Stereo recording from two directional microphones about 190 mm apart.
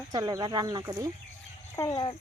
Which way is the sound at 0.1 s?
20° right (ahead or behind).